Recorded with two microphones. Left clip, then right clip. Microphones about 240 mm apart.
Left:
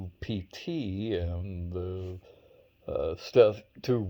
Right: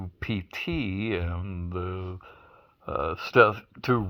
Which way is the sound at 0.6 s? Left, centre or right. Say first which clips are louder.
Right 2 dB; right.